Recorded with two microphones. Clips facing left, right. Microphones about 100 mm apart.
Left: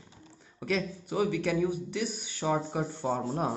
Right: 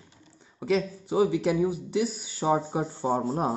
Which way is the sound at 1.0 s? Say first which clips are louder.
Right 5 dB; 25° right (ahead or behind).